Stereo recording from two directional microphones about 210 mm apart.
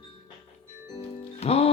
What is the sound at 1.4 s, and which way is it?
Music, 30° left (ahead or behind).